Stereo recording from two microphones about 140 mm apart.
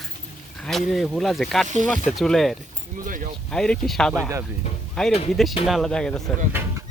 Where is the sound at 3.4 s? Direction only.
5° left (ahead or behind).